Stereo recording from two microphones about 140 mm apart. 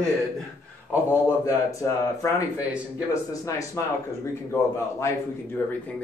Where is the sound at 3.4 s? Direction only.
25° left (ahead or behind).